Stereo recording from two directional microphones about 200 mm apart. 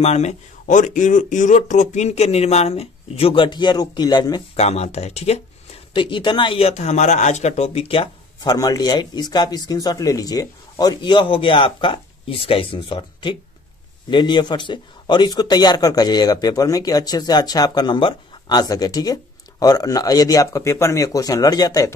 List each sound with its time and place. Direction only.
0.0 s speech: 35° left (ahead or behind)
4.6 s speech: 30° left (ahead or behind)